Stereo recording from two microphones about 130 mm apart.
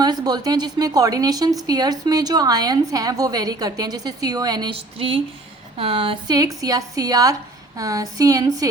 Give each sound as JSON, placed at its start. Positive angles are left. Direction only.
{"t": 0.0, "sound": "speech", "side_deg": -30}
{"t": 4.7, "sound": "speech", "side_deg": -45}
{"t": 6.3, "sound": "speech", "side_deg": -30}